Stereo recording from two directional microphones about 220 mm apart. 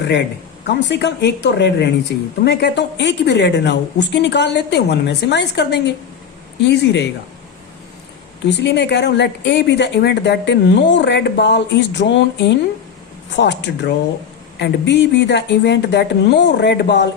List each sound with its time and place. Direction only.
0.7 s speech: 50° left (ahead or behind)
8.4 s speech: 50° left (ahead or behind)